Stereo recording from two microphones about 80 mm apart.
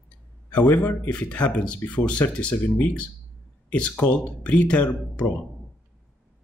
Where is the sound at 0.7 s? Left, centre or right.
Centre.